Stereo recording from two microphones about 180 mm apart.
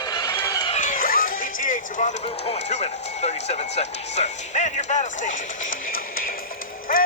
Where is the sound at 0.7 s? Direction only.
45° left (ahead or behind).